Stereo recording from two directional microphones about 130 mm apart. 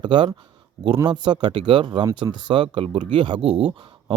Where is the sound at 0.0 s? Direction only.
40° right (ahead or behind).